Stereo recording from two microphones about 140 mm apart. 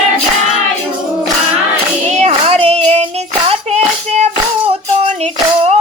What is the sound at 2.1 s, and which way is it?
Child singing, 55° right (ahead or behind).